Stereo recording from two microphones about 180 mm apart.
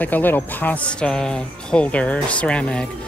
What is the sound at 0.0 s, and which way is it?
Speech, 10° left (ahead or behind).